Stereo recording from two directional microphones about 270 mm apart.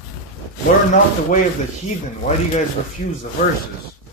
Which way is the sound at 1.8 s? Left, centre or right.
Left.